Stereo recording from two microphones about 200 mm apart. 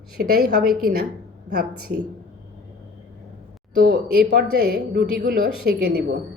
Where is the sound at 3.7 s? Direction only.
45° right (ahead or behind).